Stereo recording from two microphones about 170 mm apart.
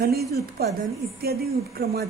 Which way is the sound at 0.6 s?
65° right (ahead or behind).